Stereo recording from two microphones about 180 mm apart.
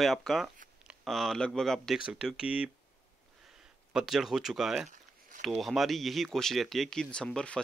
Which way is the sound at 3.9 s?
Centre (ahead or behind).